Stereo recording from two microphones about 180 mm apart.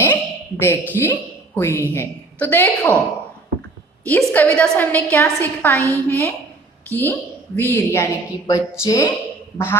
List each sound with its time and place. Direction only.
0.0 s a sound: 10° left (ahead or behind)
1.9 s a woman's voice: 10° left (ahead or behind)
4.0 s a woman's voice: 10° left (ahead or behind)